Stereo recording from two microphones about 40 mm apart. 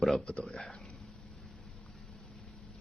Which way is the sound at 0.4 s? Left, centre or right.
Centre.